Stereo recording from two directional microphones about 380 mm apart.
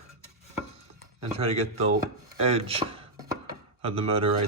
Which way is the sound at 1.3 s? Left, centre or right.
Centre.